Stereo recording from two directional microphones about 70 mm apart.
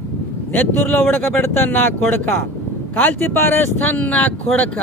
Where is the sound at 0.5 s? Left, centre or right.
Left.